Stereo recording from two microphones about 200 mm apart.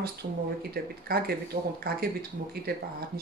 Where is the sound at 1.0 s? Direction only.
50° right (ahead or behind).